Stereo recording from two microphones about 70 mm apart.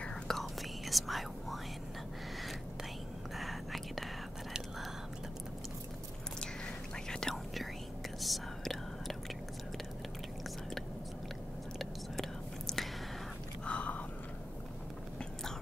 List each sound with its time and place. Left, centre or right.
0.0 s whispering: centre
0.4 s whispering: centre
3.3 s whispering: centre
7.1 s whispering: centre
11.8 s whispering: centre
13.7 s chewing: centre